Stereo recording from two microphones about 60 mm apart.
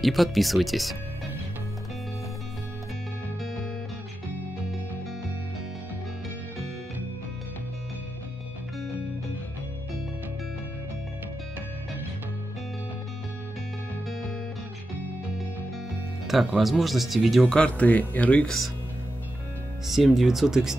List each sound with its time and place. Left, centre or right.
0.0 s speech: centre
16.3 s music: centre
16.6 s speech: centre
17.5 s speech: left
19.9 s speech: centre